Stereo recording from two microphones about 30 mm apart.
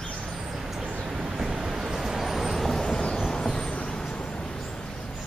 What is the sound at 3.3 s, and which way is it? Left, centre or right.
Vehicle, left.